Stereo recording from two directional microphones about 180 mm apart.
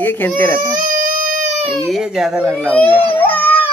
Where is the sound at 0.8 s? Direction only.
50° right (ahead or behind).